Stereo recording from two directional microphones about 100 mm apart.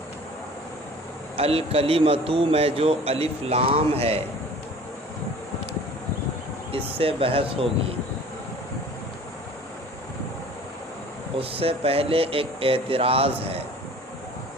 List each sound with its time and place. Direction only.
1.4 s a man's voice: 80° right
6.7 s speech: 75° right (ahead or behind)
11.3 s speech: 75° right (ahead or behind)